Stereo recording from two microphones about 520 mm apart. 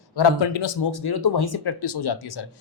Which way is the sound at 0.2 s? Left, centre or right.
Left.